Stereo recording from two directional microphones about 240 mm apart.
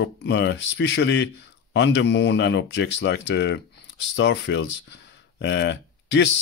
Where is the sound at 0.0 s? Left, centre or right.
Left.